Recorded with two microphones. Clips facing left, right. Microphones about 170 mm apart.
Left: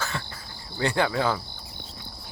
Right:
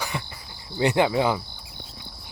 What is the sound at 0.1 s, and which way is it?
Cricket, 15° right (ahead or behind).